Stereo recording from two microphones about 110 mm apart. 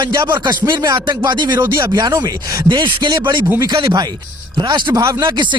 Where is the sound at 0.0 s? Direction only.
45° right (ahead or behind).